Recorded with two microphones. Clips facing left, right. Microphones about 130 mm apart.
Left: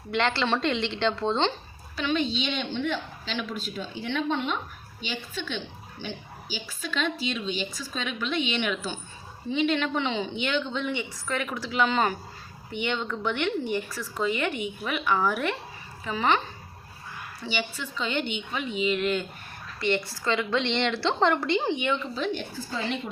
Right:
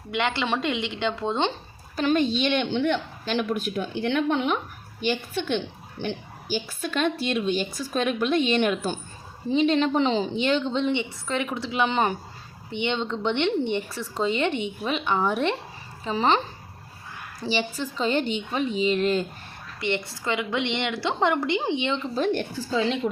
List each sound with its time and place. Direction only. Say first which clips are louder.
0.1 s a woman's voice: even; 10° right (ahead or behind)
2.0 s a woman's voice: right 5 dB; 45° right (ahead or behind); by 3.0 s 75° right (ahead or behind)
3.2 s speech: right 8 dB; 55° right (ahead or behind)
4.9 s a woman's voice: right 8 dB; 55° right (ahead or behind)
9.5 s a woman's voice: right 4 dB; 35° right (ahead or behind)
17.4 s a woman's voice: right 5 dB; 35° right (ahead or behind)
19.8 s a woman's voice: left 1 dB; 20° right (ahead or behind)
22.1 s a woman's voice: right 5 dB; 50° right (ahead or behind)